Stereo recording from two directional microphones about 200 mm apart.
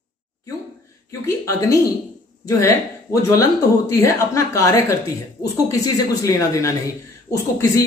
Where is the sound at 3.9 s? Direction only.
15° left (ahead or behind).